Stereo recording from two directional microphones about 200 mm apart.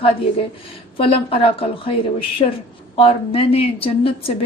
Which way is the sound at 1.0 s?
30° left (ahead or behind).